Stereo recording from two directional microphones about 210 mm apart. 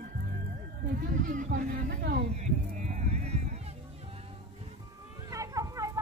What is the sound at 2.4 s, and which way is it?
Run, 35° right (ahead or behind).